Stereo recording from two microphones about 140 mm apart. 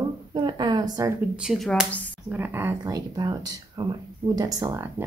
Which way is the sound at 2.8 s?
30° right (ahead or behind).